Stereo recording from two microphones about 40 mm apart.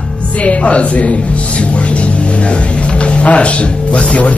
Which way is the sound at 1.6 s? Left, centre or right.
Left.